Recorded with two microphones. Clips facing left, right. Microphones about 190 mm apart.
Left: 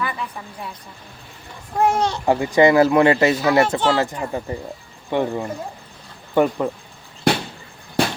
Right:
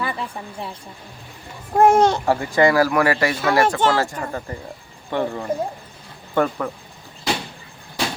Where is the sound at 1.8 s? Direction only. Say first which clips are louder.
Right 5 dB; 50° right (ahead or behind).